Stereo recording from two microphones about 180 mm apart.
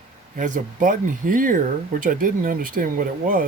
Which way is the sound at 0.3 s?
45° right (ahead or behind).